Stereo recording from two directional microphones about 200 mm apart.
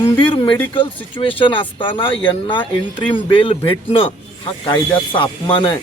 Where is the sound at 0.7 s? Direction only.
25° left (ahead or behind).